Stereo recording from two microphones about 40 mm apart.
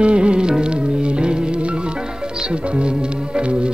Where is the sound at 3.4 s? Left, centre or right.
Right.